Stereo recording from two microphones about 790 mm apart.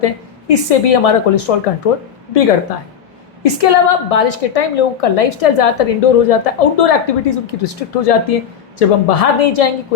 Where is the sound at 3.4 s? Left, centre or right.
Left.